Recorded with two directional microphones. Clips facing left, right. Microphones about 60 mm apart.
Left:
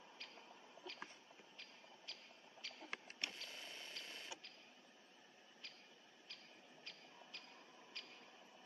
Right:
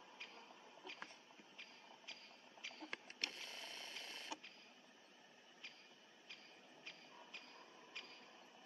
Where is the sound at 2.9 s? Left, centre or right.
Centre.